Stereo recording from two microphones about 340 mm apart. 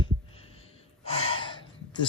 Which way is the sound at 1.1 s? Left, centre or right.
Centre.